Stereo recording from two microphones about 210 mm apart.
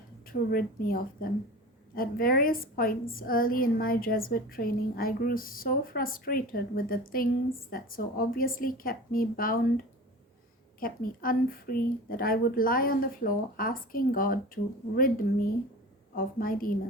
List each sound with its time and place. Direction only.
0.3 s a woman's voice: 45° left (ahead or behind)
10.8 s a woman's voice: 40° left (ahead or behind)
16.1 s a woman's voice: 45° left (ahead or behind)